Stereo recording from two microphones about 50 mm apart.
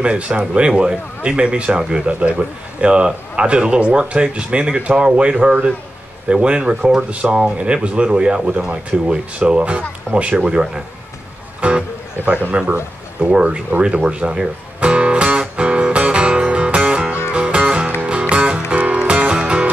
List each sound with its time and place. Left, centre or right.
0.0 s speech: right
14.8 s music: right